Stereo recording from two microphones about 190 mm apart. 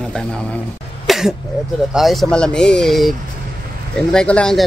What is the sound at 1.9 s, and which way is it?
A man's voice, centre (ahead or behind).